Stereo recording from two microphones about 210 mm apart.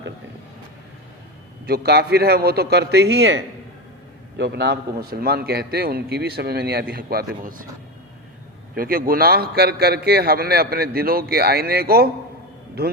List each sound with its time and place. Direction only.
1.6 s a man's voice: 50° right (ahead or behind)
8.7 s a man's voice: 45° right (ahead or behind)